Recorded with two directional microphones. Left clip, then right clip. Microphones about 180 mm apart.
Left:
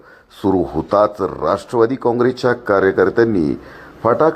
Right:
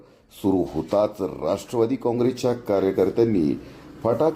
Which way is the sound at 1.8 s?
35° left (ahead or behind).